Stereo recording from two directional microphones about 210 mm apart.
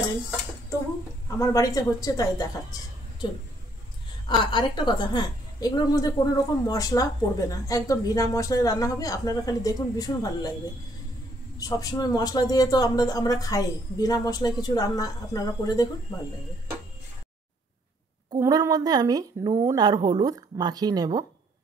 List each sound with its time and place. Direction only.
1.4 s a woman's voice: 15° left (ahead or behind)
4.4 s a woman's voice: 20° left (ahead or behind)
11.5 s a woman's voice: 15° left (ahead or behind)
18.3 s a woman's voice: 15° right (ahead or behind)